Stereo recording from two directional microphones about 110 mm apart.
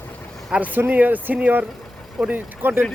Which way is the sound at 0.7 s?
15° right (ahead or behind).